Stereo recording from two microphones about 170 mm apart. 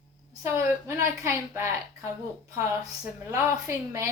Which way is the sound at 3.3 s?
15° right (ahead or behind).